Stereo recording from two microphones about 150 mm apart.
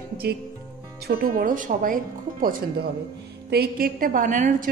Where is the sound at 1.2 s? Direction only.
75° right (ahead or behind).